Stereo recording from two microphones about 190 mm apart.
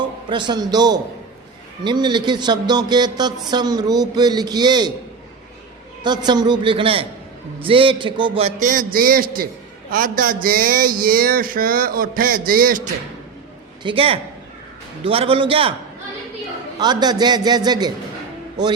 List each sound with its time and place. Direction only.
0.3 s a man's voice: 25° right (ahead or behind)
6.0 s a man's voice: 20° right (ahead or behind); by 12.9 s 45° right (ahead or behind)
13.8 s a man's voice: 30° right (ahead or behind)
16.7 s a man's voice: 20° right (ahead or behind)